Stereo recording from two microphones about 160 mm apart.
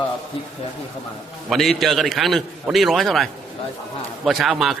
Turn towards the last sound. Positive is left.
turn(degrees=0)  # may be behind; listen again after turning